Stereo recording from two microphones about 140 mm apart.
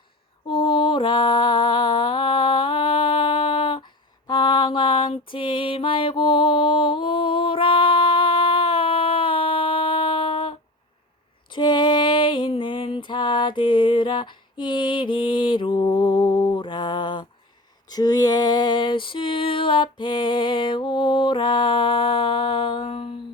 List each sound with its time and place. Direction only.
0.4 s mantra: 35° left (ahead or behind)
4.3 s music: 30° left (ahead or behind)
11.5 s music: 35° left (ahead or behind)
14.6 s mantra: 35° left (ahead or behind)
17.8 s a sound: 30° left (ahead or behind)